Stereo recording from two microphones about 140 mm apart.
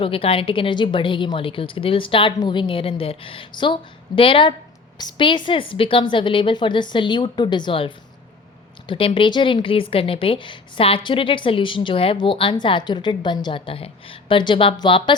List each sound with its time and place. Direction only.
0.0 s a woman's voice: 40° left (ahead or behind)